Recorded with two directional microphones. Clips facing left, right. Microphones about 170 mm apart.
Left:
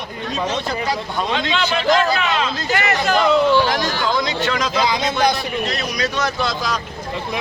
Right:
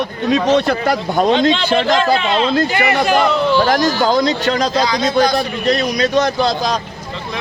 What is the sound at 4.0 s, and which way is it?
A man's voice, 35° right (ahead or behind).